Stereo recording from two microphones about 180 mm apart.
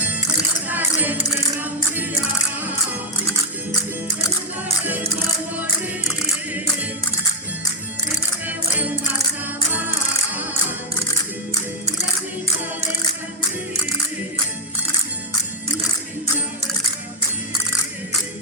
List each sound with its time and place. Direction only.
0.7 s tambourine: 10° right (ahead or behind)
8.4 s music: 10° right (ahead or behind)